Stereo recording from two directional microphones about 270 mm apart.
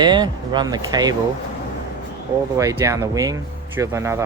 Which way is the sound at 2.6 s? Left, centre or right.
Centre.